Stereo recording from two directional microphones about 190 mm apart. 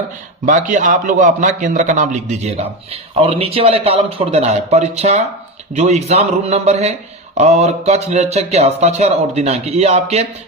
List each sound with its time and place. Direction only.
0.4 s a man's voice: 40° right (ahead or behind)